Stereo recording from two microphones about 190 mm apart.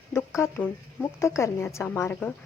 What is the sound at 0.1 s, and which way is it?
A woman's voice, 15° left (ahead or behind).